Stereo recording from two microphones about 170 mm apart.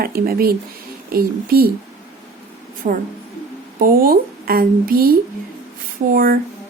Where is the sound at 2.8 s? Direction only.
45° right (ahead or behind).